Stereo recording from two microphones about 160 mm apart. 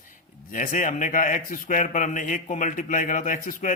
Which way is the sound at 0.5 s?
55° left (ahead or behind).